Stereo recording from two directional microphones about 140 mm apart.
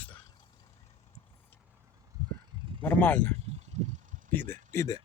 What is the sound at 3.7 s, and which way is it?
Vehicle, 55° right (ahead or behind).